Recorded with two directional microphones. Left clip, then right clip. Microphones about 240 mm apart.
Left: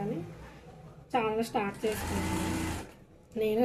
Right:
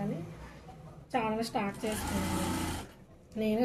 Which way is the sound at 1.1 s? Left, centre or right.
Left.